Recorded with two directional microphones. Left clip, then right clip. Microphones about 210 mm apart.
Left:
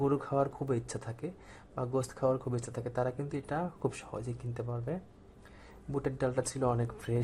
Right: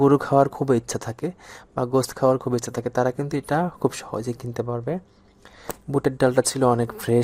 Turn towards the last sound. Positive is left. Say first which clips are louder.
# right 13 dB
turn(degrees=-40)  # may be behind; listen again after turning